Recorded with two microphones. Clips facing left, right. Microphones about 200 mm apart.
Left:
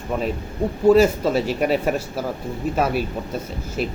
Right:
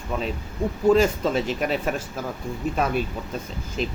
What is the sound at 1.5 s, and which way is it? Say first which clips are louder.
Speech: left 5 dB; 40° left (ahead or behind).